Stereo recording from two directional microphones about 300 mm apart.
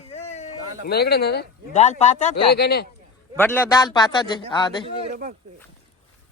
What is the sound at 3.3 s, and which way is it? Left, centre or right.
A man's voice, centre.